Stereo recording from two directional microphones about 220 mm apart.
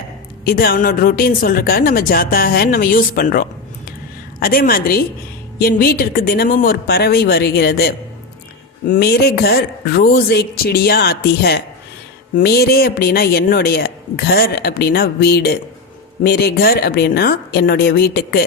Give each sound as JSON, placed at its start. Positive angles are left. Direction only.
{"t": 0.4, "sound": "a man's voice", "side_deg": 40}